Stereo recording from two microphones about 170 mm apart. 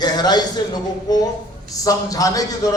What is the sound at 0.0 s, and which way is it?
Speech, 25° left (ahead or behind).